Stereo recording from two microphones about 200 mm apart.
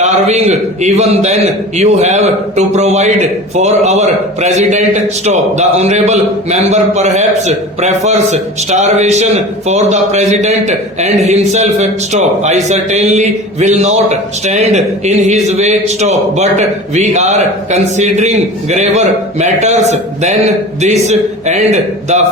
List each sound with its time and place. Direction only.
0.0 s a man's voice: 35° right (ahead or behind)